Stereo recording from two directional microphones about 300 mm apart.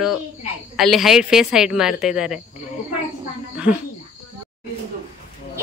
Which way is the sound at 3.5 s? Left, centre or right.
Centre.